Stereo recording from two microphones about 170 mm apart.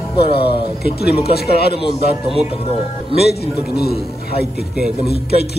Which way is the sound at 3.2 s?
70° left (ahead or behind).